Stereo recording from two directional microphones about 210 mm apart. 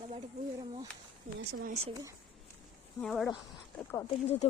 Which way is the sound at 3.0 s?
Centre (ahead or behind).